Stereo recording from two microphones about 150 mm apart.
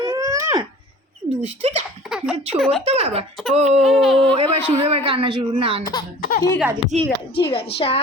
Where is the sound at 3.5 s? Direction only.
45° right (ahead or behind).